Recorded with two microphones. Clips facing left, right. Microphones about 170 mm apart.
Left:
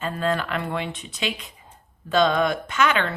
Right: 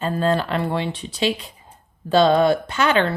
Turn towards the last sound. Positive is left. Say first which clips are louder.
# right 3 dB
turn(degrees=-30)  # may be behind; listen again after turning